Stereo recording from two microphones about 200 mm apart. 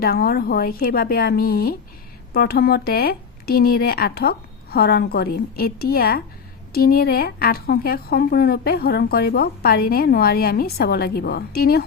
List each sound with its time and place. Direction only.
0.0 s a woman's voice: 50° left (ahead or behind)